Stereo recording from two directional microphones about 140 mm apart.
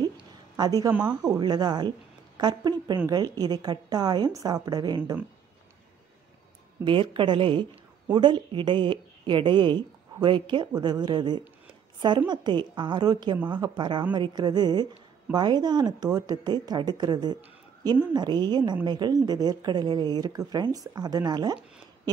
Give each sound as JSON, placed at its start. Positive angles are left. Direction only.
{"t": 0.6, "sound": "a woman's voice", "side_deg": -25}
{"t": 6.8, "sound": "a woman's voice", "side_deg": -35}